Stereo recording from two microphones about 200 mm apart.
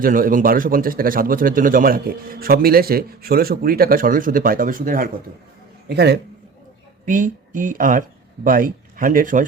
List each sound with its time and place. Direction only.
0.0 s speech: 45° right (ahead or behind)
5.9 s a man's voice: 55° right (ahead or behind)
7.0 s speech: 40° right (ahead or behind)